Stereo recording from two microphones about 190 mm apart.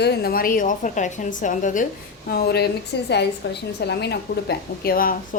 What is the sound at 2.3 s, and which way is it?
A woman's voice, 55° left (ahead or behind).